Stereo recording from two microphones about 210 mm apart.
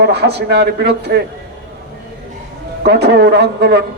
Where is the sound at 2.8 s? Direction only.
50° right (ahead or behind).